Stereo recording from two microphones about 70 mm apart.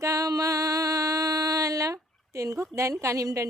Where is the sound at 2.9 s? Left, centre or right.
Right.